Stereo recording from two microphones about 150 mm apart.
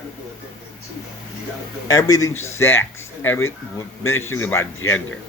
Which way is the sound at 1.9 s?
25° left (ahead or behind).